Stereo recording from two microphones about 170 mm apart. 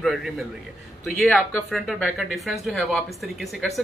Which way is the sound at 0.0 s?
Centre (ahead or behind).